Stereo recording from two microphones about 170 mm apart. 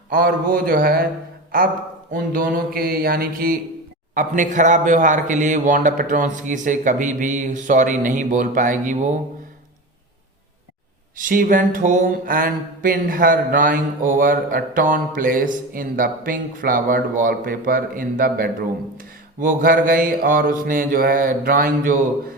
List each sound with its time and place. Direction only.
0.1 s mantra: 60° right (ahead or behind)
2.1 s mantra: 55° right (ahead or behind)
4.1 s speech: 50° right (ahead or behind)
11.2 s speech: 55° right (ahead or behind)
15.7 s mantra: 55° right (ahead or behind)